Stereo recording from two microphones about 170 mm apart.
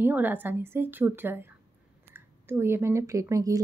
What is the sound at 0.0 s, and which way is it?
Speech, 10° right (ahead or behind).